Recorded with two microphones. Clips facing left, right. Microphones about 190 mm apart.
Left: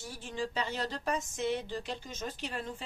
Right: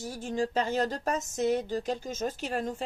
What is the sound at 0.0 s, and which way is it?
Speech, 45° right (ahead or behind).